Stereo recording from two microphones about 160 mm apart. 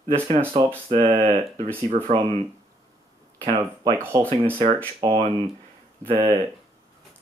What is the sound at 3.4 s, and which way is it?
Speech, 25° right (ahead or behind).